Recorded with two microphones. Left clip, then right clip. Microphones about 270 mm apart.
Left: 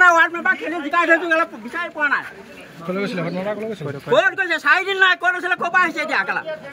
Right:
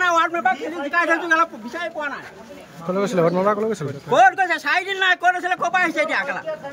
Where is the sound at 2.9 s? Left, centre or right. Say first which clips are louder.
Right 7 dB; centre.